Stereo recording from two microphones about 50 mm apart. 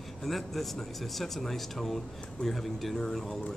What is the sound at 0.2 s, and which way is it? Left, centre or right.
A man's voice, centre.